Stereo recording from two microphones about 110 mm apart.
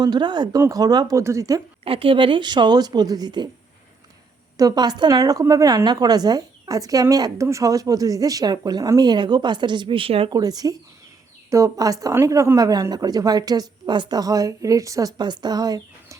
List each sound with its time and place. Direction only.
0.0 s a woman's voice: 40° right (ahead or behind)
1.8 s a woman's voice: 55° right (ahead or behind)
4.5 s a woman's voice: 35° right (ahead or behind); by 10.2 s 55° right (ahead or behind)
10.2 s a woman's voice: 35° right (ahead or behind)
15.2 s speech: 40° right (ahead or behind)